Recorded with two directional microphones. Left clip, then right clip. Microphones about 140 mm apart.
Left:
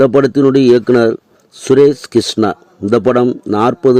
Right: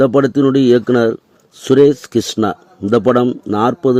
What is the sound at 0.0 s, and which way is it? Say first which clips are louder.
A man's voice: left 3 dB; 25° left (ahead or behind).